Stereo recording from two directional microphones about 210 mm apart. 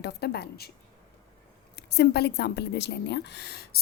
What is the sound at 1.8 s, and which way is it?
A woman's voice, 50° left (ahead or behind).